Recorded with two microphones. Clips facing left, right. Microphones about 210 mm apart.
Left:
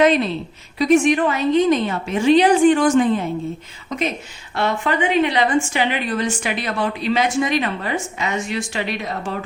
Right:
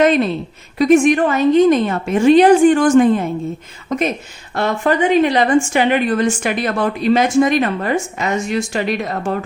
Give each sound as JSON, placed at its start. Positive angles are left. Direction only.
{"t": 0.0, "sound": "a woman's voice", "side_deg": -50}